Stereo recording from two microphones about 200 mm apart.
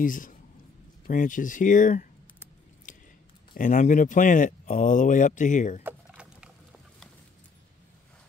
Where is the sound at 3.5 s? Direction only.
40° left (ahead or behind).